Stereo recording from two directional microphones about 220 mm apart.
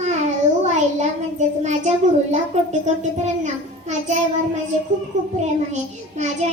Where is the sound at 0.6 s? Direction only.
30° right (ahead or behind).